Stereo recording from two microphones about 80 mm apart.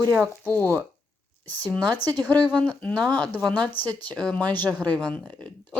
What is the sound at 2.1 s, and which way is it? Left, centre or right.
Speech, right.